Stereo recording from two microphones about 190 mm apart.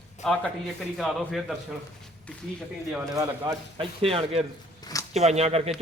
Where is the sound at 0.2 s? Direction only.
Centre (ahead or behind).